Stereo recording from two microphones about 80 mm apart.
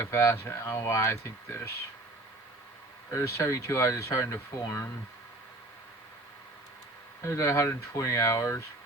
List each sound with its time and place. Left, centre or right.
0.0 s speech: left
3.1 s speech: left
7.2 s speech: left